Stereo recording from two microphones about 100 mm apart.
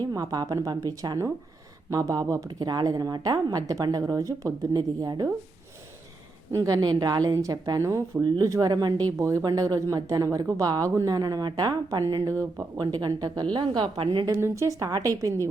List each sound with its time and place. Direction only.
0.0 s a woman's voice: 40° right (ahead or behind)
2.5 s a woman's voice: 45° right (ahead or behind)
6.6 s a woman's voice: 45° right (ahead or behind)
9.1 s speech: 30° right (ahead or behind)
9.4 s a woman's voice: 45° right (ahead or behind)
14.3 s a woman's voice: 30° right (ahead or behind)